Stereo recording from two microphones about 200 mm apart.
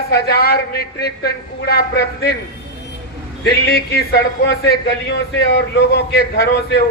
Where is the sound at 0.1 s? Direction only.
50° left (ahead or behind).